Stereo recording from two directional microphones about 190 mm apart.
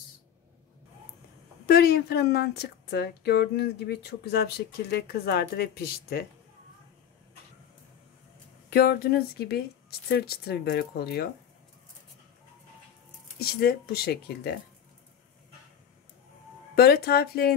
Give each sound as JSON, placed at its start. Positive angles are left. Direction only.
{"t": 1.7, "sound": "a woman's voice", "side_deg": 55}
{"t": 8.6, "sound": "a woman's voice", "side_deg": 55}
{"t": 13.4, "sound": "a woman's voice", "side_deg": 55}
{"t": 16.7, "sound": "a woman's voice", "side_deg": 55}